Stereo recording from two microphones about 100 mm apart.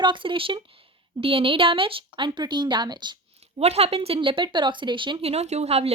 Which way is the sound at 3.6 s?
90° right.